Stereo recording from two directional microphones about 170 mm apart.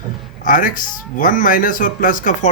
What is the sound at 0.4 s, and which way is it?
Speech, 50° left (ahead or behind).